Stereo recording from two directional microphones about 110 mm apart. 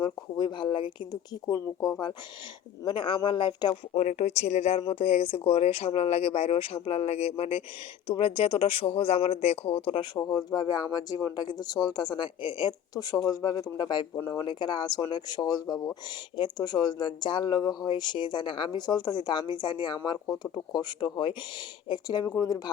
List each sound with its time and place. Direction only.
0.0 s speech: 45° left (ahead or behind)
3.9 s speech: 90° left; by 7.6 s 65° left (ahead or behind)
8.0 s speech: 55° left (ahead or behind)
10.2 s speech: 35° left (ahead or behind)
20.1 s speech: 15° left (ahead or behind)
20.4 s speech: 40° left (ahead or behind)